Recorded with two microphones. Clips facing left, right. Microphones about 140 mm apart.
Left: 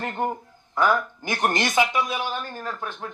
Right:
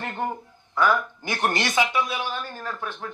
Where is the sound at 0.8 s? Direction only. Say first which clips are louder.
Even; 20° left (ahead or behind).